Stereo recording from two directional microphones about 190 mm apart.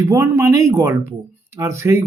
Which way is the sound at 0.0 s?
15° right (ahead or behind).